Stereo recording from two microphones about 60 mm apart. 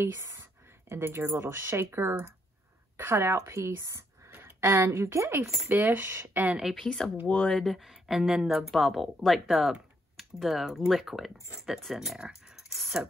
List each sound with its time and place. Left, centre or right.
0.3 s a woman's voice: right
4.3 s a sound: right
4.7 s a woman's voice: right
5.7 s speech: right
6.7 s speech: centre
7.2 s speech: centre
7.5 s speech: centre
12.2 s a sound: centre
12.7 s a sound: centre